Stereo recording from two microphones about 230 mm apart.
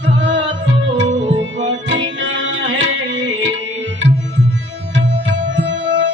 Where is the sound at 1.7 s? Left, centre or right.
Right.